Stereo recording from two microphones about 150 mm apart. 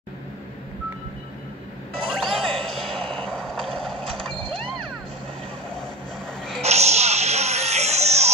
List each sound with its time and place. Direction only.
2.0 s music: centre (ahead or behind)
3.3 s vehicle: 5° left (ahead or behind)
6.6 s a sound: 45° right (ahead or behind)